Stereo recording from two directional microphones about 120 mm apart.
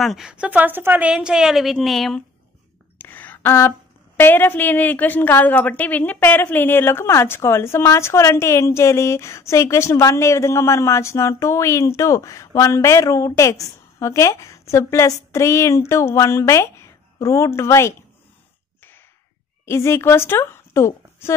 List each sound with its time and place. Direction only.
0.0 s speech: centre (ahead or behind)
3.0 s a sound: 15° left (ahead or behind)
4.2 s a woman's voice: 20° left (ahead or behind)
19.6 s speech: 20° left (ahead or behind)